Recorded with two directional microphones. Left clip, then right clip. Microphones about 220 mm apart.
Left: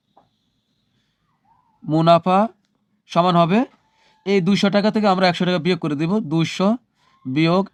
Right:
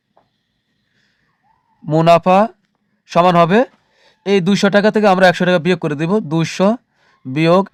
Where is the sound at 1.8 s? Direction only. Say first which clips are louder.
Right 4 dB; 40° right (ahead or behind).